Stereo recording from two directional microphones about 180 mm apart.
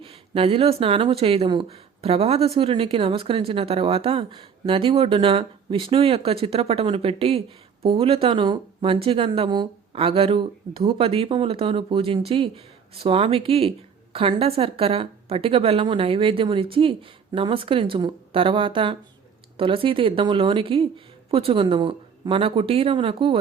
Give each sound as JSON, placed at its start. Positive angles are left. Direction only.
{"t": 0.0, "sound": "speech", "side_deg": -30}